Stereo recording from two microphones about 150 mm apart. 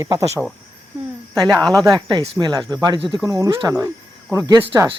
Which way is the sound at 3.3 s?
25° right (ahead or behind).